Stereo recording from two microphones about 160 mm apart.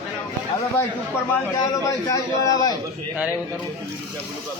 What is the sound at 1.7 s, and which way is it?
A man's voice, 20° left (ahead or behind).